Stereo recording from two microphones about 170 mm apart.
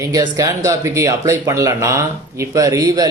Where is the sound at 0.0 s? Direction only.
20° right (ahead or behind).